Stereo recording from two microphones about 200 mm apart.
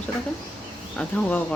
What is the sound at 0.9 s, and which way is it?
Speech, 5° left (ahead or behind).